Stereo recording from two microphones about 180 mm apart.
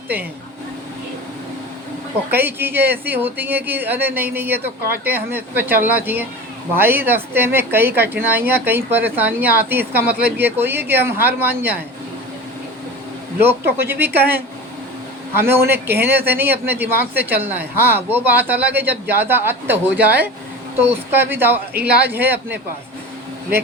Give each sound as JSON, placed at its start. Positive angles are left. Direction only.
{"t": 2.3, "sound": "speech", "side_deg": -10}
{"t": 13.7, "sound": "speech", "side_deg": -10}
{"t": 15.7, "sound": "speech", "side_deg": -10}
{"t": 21.7, "sound": "speech", "side_deg": -60}
{"t": 22.1, "sound": "speech", "side_deg": -10}